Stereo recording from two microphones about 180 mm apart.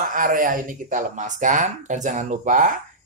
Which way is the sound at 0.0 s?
50° right (ahead or behind).